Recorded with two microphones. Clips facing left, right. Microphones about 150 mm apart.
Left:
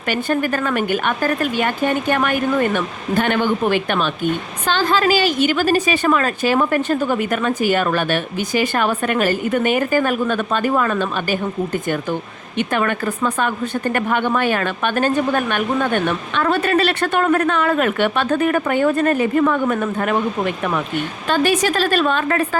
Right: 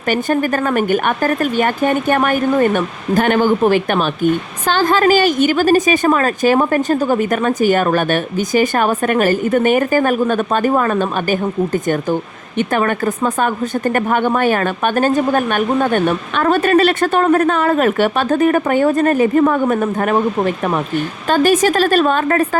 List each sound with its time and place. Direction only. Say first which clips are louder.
0.1 s a woman's voice: right 3 dB; 45° right (ahead or behind)